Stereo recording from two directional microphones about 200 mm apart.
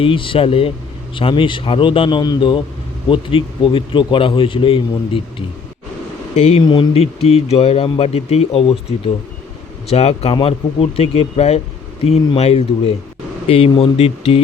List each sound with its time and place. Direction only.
0.0 s speech: 25° left (ahead or behind)
6.3 s speech: 30° left (ahead or behind)
9.9 s speech: 30° left (ahead or behind)